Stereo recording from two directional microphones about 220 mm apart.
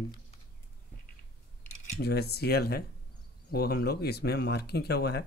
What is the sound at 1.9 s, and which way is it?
Speech, 45° left (ahead or behind).